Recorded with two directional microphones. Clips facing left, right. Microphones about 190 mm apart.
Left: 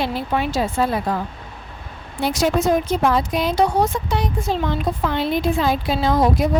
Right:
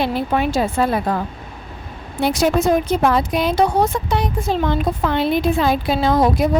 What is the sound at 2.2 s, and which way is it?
A woman's voice, 60° right (ahead or behind).